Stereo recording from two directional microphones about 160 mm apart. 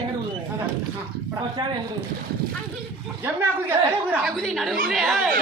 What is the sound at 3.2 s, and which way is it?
A woman's voice, 15° right (ahead or behind).